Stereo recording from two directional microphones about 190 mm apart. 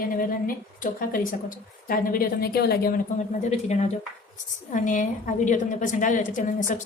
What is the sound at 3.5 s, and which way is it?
A woman's voice, 35° left (ahead or behind).